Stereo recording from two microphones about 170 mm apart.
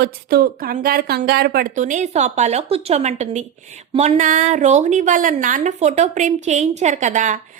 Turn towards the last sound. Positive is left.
turn(degrees=-45)  # may be behind; listen again after turning